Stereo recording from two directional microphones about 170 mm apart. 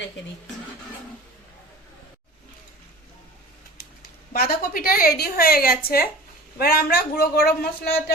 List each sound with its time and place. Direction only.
4.3 s a woman's voice: 60° left (ahead or behind)